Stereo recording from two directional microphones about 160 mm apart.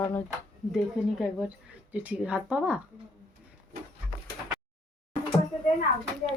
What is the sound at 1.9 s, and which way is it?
Speech, 10° right (ahead or behind).